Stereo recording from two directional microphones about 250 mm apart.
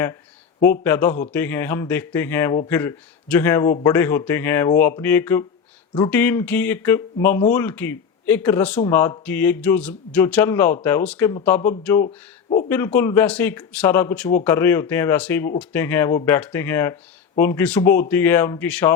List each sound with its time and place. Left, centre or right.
0.6 s speech: centre
12.0 s speech: left
12.6 s speech: centre